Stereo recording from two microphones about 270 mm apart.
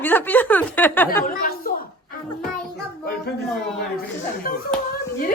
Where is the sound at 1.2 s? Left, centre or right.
Left.